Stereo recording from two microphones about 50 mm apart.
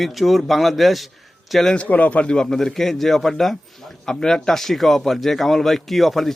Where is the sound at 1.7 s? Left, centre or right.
Left.